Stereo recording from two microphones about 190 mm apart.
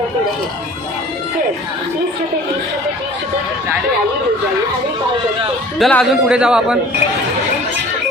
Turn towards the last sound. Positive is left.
turn(degrees=-5)  # may be behind; listen again after turning